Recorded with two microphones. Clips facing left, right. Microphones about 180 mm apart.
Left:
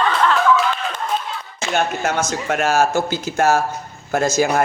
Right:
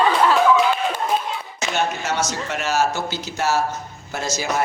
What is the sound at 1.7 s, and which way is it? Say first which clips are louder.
Speech: left 3 dB; 55° left (ahead or behind).